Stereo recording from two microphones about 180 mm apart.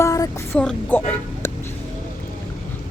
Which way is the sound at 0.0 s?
15° left (ahead or behind).